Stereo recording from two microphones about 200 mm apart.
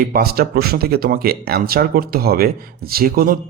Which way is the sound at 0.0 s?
50° right (ahead or behind).